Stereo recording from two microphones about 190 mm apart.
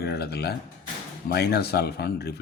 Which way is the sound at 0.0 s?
60° left (ahead or behind).